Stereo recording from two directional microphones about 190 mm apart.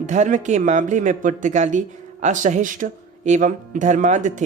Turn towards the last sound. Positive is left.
turn(degrees=-40)  # may be behind; listen again after turning